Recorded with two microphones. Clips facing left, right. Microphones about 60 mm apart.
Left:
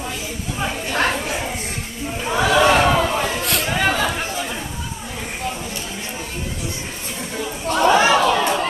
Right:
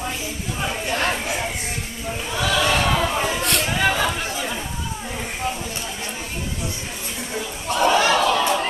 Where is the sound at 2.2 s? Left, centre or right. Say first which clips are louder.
Left 6 dB; left.